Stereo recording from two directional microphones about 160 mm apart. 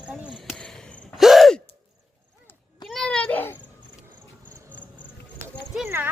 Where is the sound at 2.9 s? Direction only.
5° left (ahead or behind).